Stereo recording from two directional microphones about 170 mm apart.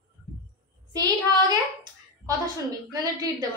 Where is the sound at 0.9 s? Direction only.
25° right (ahead or behind).